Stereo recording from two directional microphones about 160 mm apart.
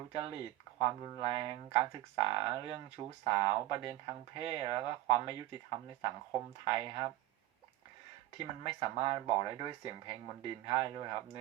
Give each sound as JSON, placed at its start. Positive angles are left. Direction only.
{"t": 0.1, "sound": "speech", "side_deg": -30}
{"t": 6.7, "sound": "speech", "side_deg": -25}
{"t": 8.4, "sound": "speech", "side_deg": -30}